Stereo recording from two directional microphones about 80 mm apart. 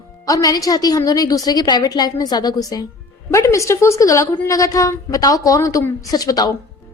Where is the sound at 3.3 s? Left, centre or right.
Left.